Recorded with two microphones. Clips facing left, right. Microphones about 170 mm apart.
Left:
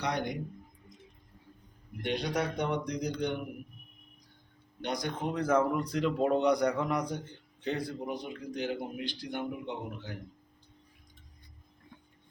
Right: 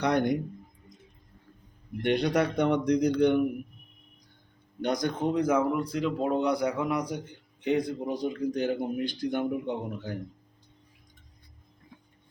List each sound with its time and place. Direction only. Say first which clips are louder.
0.0 s a man's voice: right 8 dB; 55° right (ahead or behind)
2.0 s a man's voice: right 7 dB; 60° right (ahead or behind)
4.8 s speech: right 6 dB; 45° right (ahead or behind)
5.2 s speech: right 2 dB; 15° right (ahead or behind)
8.0 s speech: right 8 dB; 40° right (ahead or behind)